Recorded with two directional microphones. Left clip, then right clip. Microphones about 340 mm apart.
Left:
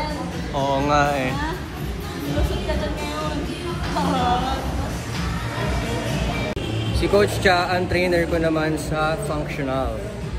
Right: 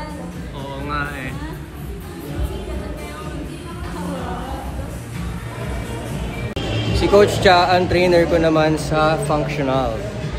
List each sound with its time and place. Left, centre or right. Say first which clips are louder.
0.8 s speech: left 3 dB; centre
7.0 s speech: right 5 dB; centre